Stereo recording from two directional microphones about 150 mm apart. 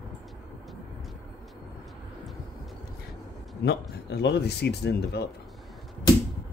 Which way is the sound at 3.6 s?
90° left.